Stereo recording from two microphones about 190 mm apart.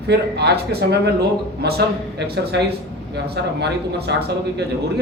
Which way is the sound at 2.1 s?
60° right (ahead or behind).